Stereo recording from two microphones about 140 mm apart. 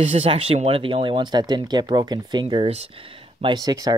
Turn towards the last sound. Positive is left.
turn(degrees=-25)  # may be behind; listen again after turning